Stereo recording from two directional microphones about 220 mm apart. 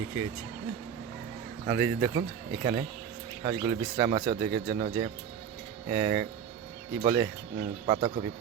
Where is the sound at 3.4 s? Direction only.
25° right (ahead or behind).